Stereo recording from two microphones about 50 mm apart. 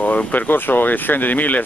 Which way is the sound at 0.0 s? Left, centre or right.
Left.